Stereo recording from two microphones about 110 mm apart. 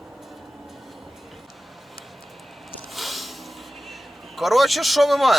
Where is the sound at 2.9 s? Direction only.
Centre (ahead or behind).